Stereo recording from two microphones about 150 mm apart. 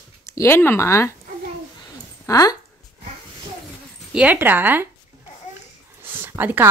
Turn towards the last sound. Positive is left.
turn(degrees=-15)  # may be behind; listen again after turning